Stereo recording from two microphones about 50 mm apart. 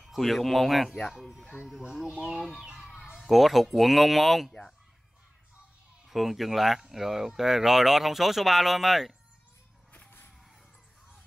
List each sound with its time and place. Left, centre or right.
0.0 s speech: centre
2.9 s speech: centre
6.0 s speech: centre